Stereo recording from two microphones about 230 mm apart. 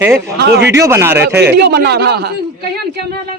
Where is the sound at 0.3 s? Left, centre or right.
Right.